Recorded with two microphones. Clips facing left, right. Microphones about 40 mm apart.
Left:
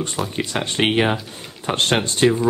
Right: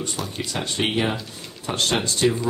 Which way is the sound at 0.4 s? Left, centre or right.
Left.